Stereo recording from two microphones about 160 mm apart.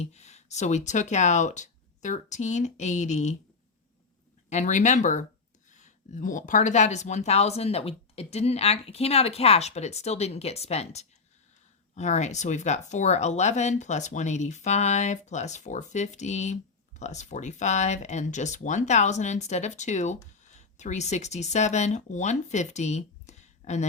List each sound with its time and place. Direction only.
0.0 s speech: 45° left (ahead or behind)
4.4 s speech: 50° left (ahead or behind)